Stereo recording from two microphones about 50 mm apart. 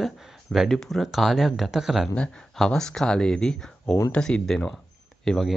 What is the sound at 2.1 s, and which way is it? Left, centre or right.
Speech, left.